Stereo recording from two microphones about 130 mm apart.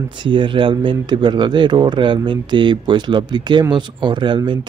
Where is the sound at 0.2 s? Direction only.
40° right (ahead or behind).